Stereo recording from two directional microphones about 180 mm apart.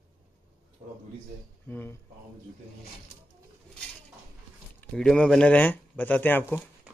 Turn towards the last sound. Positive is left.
turn(degrees=10)  # may be behind; listen again after turning